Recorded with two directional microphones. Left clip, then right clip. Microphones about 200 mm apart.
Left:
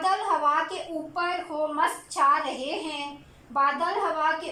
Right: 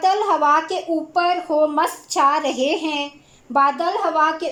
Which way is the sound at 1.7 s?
50° right (ahead or behind).